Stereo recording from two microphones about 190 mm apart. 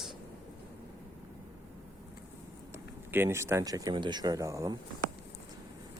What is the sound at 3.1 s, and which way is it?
Speech, 15° right (ahead or behind).